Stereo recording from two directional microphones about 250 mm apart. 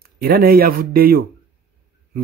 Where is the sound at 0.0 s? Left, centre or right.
Right.